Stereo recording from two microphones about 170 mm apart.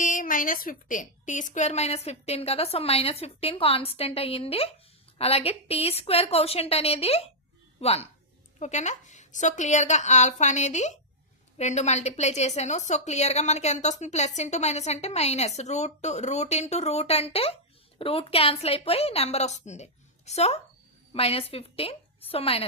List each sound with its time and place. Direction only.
0.0 s a woman's voice: 50° left (ahead or behind); by 22.6 s 35° left (ahead or behind)